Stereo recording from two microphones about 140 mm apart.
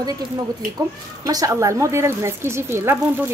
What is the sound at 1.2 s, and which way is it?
A woman's voice, 25° right (ahead or behind).